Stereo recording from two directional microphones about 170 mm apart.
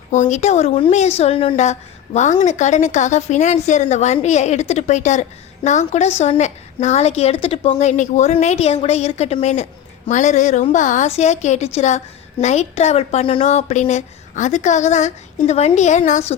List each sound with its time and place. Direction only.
0.1 s a woman's voice: 45° left (ahead or behind)